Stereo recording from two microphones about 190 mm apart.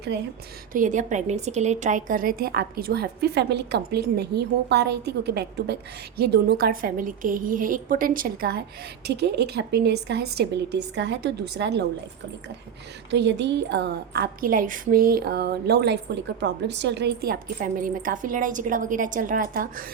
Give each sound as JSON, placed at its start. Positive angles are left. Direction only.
{"t": 0.1, "sound": "speech", "side_deg": -60}
{"t": 0.7, "sound": "a woman's voice", "side_deg": -45}
{"t": 13.1, "sound": "a woman's voice", "side_deg": -65}